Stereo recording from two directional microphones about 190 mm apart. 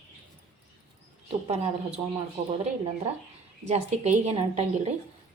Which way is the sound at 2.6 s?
35° right (ahead or behind).